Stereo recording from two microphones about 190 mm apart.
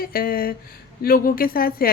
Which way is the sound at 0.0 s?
50° left (ahead or behind).